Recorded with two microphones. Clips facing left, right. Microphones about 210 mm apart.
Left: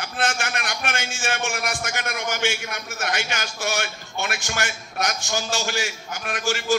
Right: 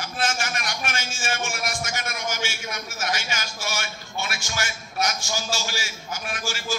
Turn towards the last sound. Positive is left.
turn(degrees=60)  # may be behind; listen again after turning